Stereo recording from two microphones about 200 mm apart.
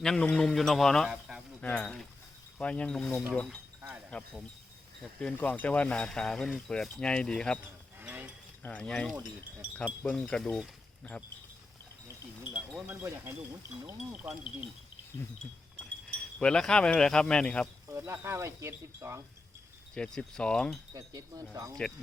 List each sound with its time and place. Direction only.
0.0 s speech: 5° left (ahead or behind)
3.8 s chink: 10° right (ahead or behind)
5.2 s speech: 5° left (ahead or behind)
8.0 s mechanisms: 10° right (ahead or behind)
8.6 s speech: 10° left (ahead or behind)
12.4 s speech: 5° right (ahead or behind)
15.7 s speech: 5° left (ahead or behind)
17.8 s speech: 15° right (ahead or behind)
19.9 s speech: 5° left (ahead or behind)
20.9 s speech: 20° right (ahead or behind)